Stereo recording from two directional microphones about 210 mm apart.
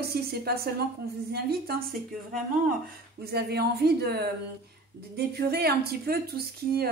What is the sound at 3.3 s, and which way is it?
A woman's voice, 50° right (ahead or behind).